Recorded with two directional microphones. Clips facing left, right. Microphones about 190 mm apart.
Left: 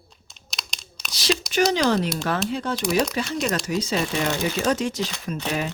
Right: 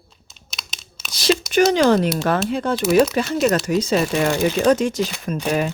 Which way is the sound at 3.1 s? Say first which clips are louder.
Right 7 dB; 50° right (ahead or behind).